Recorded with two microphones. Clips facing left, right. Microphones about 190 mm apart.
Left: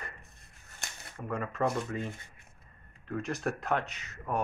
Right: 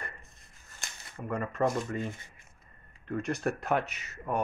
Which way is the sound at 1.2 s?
Centre (ahead or behind).